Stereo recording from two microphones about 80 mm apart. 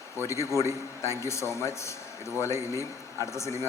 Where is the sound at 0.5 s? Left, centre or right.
Left.